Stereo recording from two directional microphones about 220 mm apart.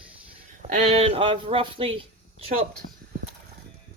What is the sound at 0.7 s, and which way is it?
Speech, 25° right (ahead or behind).